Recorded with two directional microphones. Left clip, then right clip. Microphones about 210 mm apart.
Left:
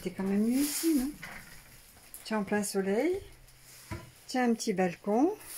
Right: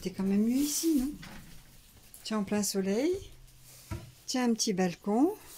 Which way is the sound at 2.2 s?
5° right (ahead or behind).